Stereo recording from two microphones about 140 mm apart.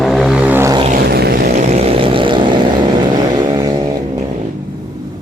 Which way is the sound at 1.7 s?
40° right (ahead or behind).